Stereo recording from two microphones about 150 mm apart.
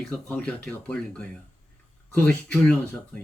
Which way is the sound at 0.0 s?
5° left (ahead or behind).